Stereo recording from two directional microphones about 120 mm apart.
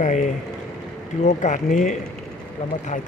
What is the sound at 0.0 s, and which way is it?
Speech, 90° left.